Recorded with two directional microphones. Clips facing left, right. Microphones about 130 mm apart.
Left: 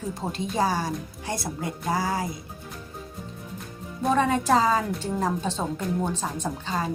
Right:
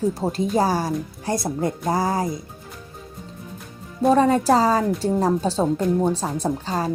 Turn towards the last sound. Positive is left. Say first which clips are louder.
# right 5 dB
turn(degrees=-35)  # may be behind; listen again after turning